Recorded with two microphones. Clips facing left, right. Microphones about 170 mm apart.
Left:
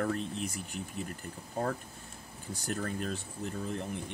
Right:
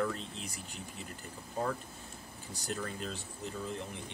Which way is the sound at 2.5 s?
50° left (ahead or behind).